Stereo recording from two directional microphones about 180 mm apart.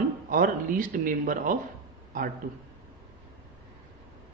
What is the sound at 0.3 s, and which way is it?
Speech, 50° right (ahead or behind).